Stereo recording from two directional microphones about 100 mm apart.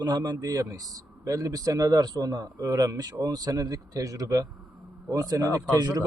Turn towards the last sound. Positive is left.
turn(degrees=-40)  # may be behind; listen again after turning